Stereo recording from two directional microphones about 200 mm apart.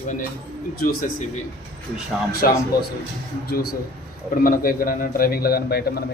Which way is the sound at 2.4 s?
45° left (ahead or behind).